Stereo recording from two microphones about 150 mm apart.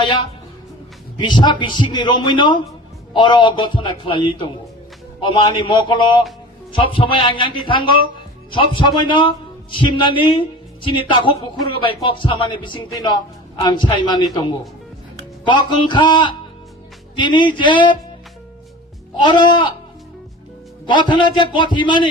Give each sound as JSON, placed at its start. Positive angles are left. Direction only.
{"t": 1.2, "sound": "a man's voice", "side_deg": 30}
{"t": 19.2, "sound": "speech", "side_deg": 30}
{"t": 20.8, "sound": "speech", "side_deg": 30}